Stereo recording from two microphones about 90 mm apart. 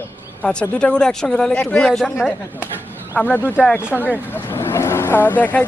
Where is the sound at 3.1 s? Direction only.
20° left (ahead or behind).